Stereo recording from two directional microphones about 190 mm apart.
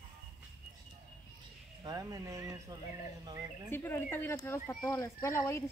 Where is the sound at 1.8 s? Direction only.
15° right (ahead or behind).